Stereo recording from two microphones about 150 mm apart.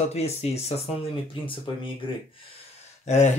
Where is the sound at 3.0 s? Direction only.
50° left (ahead or behind).